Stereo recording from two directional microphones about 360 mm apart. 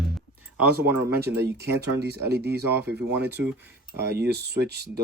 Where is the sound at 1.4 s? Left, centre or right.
Right.